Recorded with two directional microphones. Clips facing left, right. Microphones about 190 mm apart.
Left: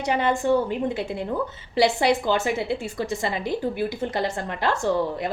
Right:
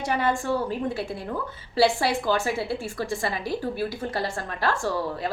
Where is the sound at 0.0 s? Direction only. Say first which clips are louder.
Left 3 dB; 20° left (ahead or behind).